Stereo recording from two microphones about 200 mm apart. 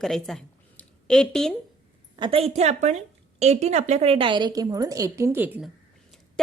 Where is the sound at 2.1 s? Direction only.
25° right (ahead or behind); by 5.7 s 10° right (ahead or behind).